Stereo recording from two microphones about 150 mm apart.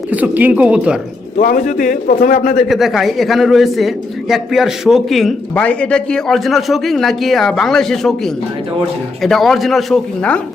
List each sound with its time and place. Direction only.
0.1 s speech: 10° right (ahead or behind)
1.4 s a man's voice: 60° left (ahead or behind)
2.6 s a man's voice: centre (ahead or behind)